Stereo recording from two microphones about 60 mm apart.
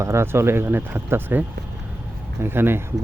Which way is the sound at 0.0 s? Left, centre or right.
Right.